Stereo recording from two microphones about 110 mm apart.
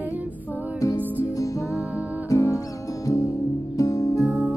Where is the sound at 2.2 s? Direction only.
25° left (ahead or behind).